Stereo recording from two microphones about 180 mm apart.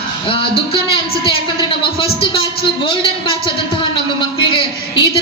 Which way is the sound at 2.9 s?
25° left (ahead or behind).